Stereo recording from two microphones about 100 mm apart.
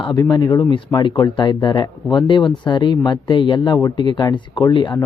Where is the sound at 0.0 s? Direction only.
50° left (ahead or behind).